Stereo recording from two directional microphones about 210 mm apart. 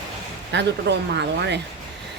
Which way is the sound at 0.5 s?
55° right (ahead or behind).